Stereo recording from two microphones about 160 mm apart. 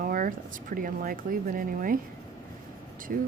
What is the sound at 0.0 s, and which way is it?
Speech, 60° right (ahead or behind).